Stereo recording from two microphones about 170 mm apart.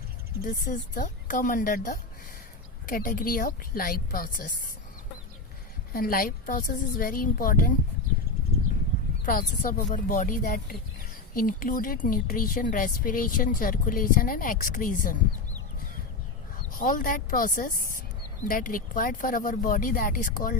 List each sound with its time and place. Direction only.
0.4 s a woman's voice: 55° left (ahead or behind)
5.9 s a woman's voice: 60° left (ahead or behind)
9.3 s a woman's voice: 55° left (ahead or behind)
16.7 s a woman's voice: 55° left (ahead or behind)